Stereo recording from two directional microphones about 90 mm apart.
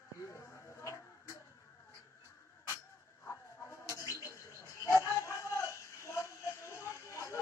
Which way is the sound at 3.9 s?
35° left (ahead or behind).